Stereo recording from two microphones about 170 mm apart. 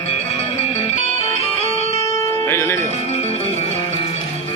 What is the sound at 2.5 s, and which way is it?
Music, 15° left (ahead or behind).